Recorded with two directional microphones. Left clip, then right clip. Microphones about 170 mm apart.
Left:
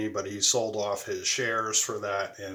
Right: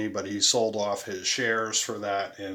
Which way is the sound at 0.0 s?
30° right (ahead or behind).